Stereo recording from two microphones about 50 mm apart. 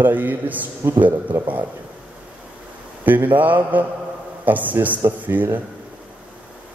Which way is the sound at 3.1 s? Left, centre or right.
Right.